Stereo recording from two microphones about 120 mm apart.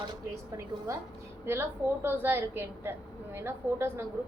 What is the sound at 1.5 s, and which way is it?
A woman's voice, 20° right (ahead or behind).